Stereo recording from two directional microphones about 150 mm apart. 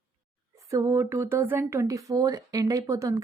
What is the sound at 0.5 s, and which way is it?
A woman's voice, 20° right (ahead or behind).